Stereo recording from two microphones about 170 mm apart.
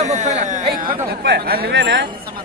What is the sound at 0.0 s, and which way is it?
Speech, 45° right (ahead or behind).